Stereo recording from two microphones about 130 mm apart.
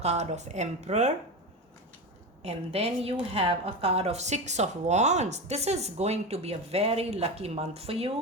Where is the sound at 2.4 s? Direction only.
55° right (ahead or behind).